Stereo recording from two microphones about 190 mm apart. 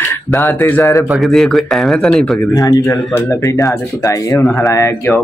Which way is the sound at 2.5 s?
20° left (ahead or behind).